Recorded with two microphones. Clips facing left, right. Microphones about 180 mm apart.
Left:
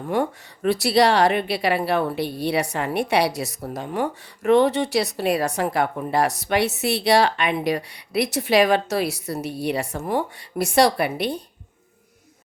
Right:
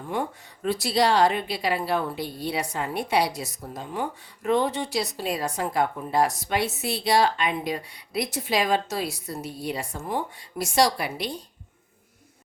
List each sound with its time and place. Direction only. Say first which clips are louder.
0.1 s a woman's voice: left 6 dB; 70° left (ahead or behind)